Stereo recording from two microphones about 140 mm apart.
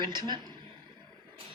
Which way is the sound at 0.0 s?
30° right (ahead or behind).